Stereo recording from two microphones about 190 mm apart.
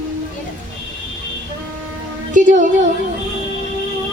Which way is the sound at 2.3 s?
40° right (ahead or behind).